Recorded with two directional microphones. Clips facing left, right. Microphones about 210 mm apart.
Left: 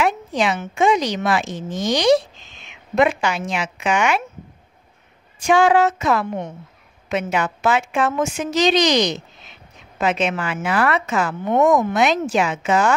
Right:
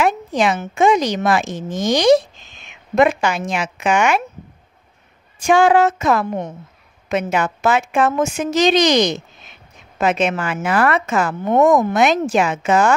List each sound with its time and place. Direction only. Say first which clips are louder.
0.0 s a woman's voice: right 3 dB; 45° right (ahead or behind)
5.4 s a woman's voice: right 2 dB; 50° right (ahead or behind)